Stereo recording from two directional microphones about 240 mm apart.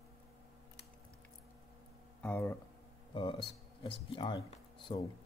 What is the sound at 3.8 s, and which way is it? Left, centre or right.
Speech, centre.